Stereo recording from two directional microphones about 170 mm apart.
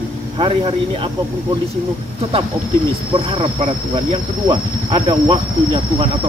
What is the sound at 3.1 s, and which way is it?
Speech, 35° right (ahead or behind).